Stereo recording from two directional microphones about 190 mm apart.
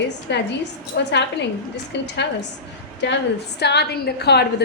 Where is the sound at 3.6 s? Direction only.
60° left (ahead or behind).